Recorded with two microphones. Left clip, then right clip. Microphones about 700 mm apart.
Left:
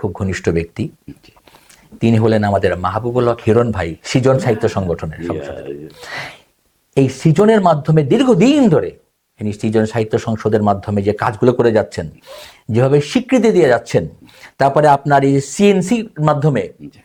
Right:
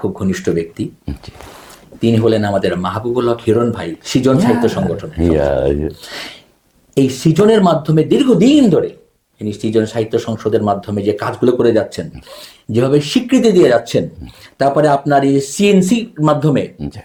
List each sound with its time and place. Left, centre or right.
0.2 s speech: left
2.0 s speech: left